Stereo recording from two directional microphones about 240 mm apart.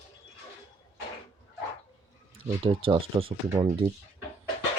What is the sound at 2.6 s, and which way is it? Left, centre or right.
Speech, right.